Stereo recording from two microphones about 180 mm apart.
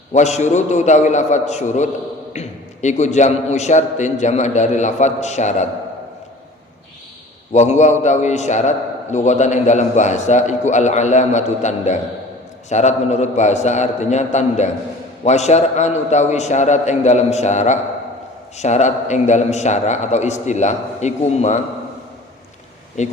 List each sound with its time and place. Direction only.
0.1 s a man's voice: 40° left (ahead or behind)
7.5 s a man's voice: 40° left (ahead or behind)
23.0 s a man's voice: 40° left (ahead or behind)